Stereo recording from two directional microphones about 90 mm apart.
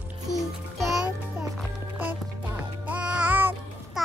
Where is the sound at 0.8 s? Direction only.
5° right (ahead or behind).